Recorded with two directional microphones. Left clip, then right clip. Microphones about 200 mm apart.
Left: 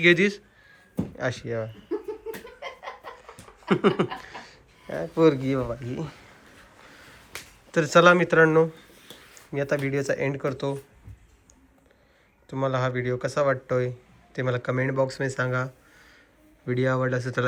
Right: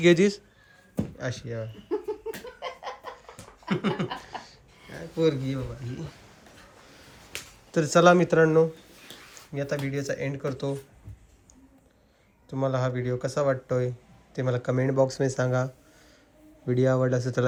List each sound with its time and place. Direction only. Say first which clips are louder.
0.0 s speech: left 1 dB; 20° right (ahead or behind)
0.9 s speech: left 4 dB; 10° right (ahead or behind)
3.2 s chuckle: left 1 dB; centre (ahead or behind)
4.2 s a sound: right 1 dB; 15° right (ahead or behind)
4.9 s speech: left 5 dB; centre (ahead or behind)
7.7 s speech: left 2 dB; 15° right (ahead or behind)
12.5 s speech: left 2 dB; 15° right (ahead or behind)